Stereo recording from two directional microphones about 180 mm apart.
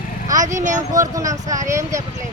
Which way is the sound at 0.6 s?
45° right (ahead or behind).